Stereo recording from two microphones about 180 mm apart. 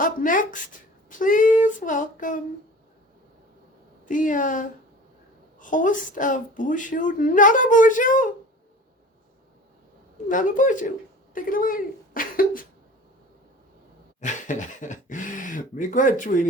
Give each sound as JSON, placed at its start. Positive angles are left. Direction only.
{"t": 0.0, "sound": "speech", "side_deg": 50}
{"t": 4.0, "sound": "speech", "side_deg": 45}
{"t": 10.2, "sound": "speech", "side_deg": 45}
{"t": 14.2, "sound": "speech", "side_deg": 45}